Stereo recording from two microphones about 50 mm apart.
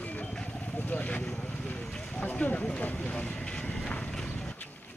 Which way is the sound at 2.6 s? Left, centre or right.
Left.